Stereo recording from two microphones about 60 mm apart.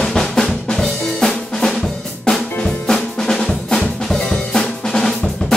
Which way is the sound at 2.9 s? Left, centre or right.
Centre.